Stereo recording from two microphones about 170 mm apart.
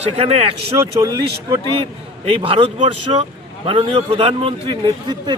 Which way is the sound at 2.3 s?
35° right (ahead or behind).